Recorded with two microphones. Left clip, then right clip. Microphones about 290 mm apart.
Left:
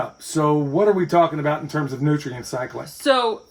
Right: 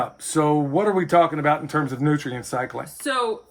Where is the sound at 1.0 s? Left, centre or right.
Centre.